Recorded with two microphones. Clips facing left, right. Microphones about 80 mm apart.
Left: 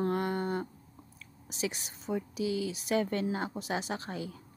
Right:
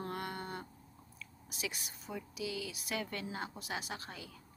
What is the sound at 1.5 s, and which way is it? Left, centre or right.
A woman's voice, left.